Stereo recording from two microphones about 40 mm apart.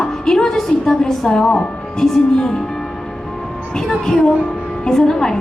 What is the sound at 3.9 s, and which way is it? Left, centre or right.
A woman's voice, centre.